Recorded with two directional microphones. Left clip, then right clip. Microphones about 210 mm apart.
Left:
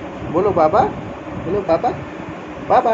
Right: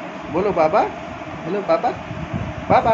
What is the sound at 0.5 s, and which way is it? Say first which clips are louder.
Speech: left 2 dB; 10° right (ahead or behind).